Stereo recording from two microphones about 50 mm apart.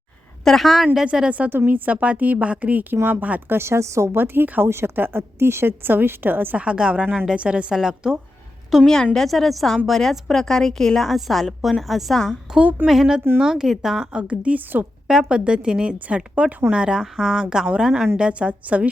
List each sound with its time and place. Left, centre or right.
0.4 s a woman's voice: centre
1.1 s a woman's voice: centre
1.5 s a woman's voice: right
2.9 s a woman's voice: right
3.5 s speech: right
4.1 s a woman's voice: right
4.6 s a woman's voice: right
6.6 s a woman's voice: right
14.1 s a woman's voice: right
14.6 s a woman's voice: right
15.0 s a woman's voice: centre